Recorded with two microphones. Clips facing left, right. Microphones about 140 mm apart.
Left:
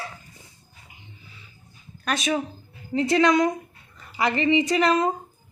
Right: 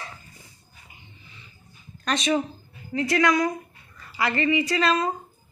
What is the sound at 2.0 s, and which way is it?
Speech, 5° left (ahead or behind).